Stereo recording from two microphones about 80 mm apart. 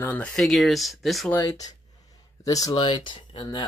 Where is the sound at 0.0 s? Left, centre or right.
Left.